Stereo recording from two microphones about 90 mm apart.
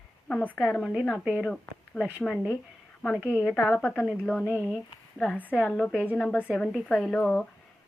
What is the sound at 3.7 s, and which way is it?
Speech, 20° left (ahead or behind).